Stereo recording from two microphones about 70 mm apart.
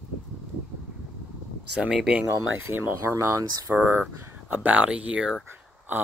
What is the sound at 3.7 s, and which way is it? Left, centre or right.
Speech, right.